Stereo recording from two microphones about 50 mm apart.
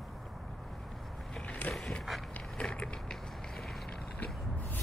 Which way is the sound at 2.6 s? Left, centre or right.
Left.